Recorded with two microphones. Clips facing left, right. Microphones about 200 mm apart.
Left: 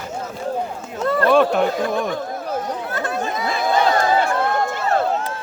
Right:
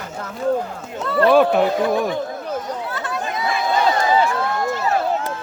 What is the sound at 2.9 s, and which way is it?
Chatter, 45° left (ahead or behind).